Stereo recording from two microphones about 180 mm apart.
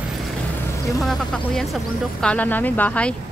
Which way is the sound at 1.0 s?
Centre (ahead or behind).